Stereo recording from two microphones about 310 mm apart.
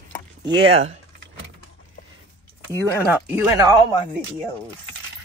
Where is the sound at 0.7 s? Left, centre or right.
Centre.